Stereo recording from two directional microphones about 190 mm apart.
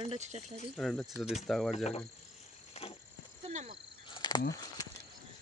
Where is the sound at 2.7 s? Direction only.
35° left (ahead or behind).